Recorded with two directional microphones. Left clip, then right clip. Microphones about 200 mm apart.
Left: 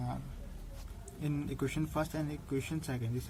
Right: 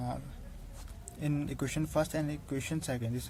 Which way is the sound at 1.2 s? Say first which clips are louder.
Right 1 dB; 60° right (ahead or behind).